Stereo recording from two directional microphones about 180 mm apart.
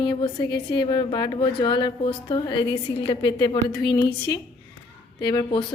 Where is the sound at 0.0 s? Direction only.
25° left (ahead or behind).